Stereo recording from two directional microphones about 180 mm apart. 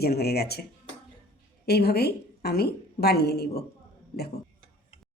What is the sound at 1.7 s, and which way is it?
A woman's voice, 60° left (ahead or behind).